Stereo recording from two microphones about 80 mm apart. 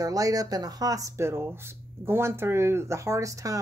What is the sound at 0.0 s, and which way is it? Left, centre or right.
Speech, right.